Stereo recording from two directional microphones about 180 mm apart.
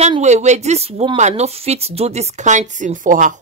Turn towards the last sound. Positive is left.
turn(degrees=-45)  # may be behind; listen again after turning